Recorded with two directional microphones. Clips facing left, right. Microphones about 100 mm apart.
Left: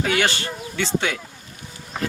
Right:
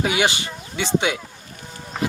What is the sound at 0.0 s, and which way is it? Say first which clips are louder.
Speech: right 1 dB; 15° right (ahead or behind).